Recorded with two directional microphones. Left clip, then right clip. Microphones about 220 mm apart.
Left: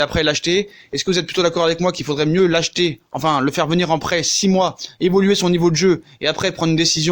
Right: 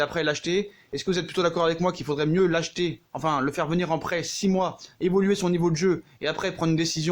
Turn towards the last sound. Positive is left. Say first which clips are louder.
# left 9 dB
turn(degrees=30)  # may be behind; listen again after turning